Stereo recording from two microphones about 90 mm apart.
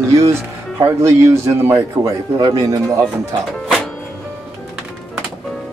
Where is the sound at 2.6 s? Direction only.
35° right (ahead or behind).